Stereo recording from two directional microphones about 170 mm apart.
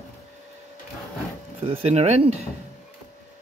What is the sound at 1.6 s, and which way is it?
Speech, 35° right (ahead or behind).